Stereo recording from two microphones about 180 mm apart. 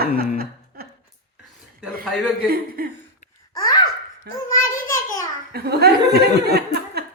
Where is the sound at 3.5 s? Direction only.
20° left (ahead or behind).